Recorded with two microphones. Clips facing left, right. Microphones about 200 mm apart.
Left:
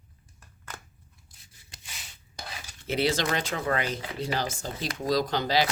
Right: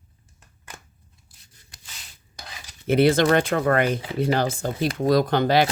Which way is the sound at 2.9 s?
55° right (ahead or behind).